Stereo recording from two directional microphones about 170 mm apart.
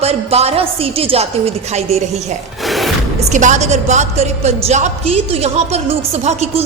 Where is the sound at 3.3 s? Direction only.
45° right (ahead or behind).